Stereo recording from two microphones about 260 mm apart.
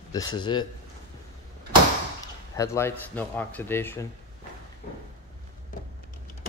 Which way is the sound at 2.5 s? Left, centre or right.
Centre.